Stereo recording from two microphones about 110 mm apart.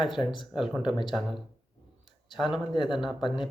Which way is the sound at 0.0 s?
Centre (ahead or behind).